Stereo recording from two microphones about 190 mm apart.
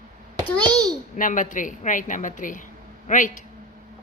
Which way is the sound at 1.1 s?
45° left (ahead or behind).